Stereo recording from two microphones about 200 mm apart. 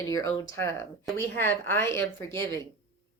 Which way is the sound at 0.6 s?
15° left (ahead or behind).